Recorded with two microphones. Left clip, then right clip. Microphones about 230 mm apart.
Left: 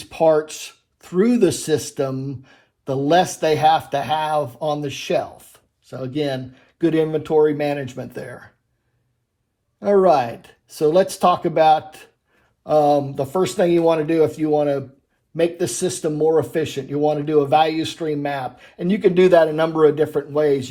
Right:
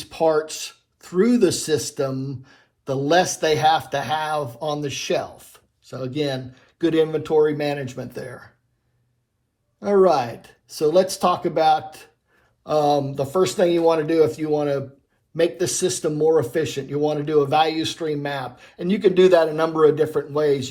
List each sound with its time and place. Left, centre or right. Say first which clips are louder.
0.1 s speech: left 3 dB; left
9.8 s speech: left 2 dB; left